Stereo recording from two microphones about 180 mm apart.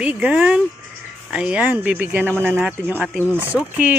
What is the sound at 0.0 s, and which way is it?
A man's voice, 5° right (ahead or behind).